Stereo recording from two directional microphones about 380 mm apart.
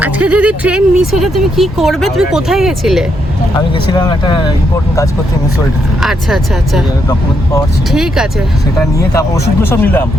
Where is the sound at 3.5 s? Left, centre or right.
Centre.